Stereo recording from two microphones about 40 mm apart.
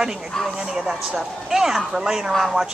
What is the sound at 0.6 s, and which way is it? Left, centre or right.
Speech, centre.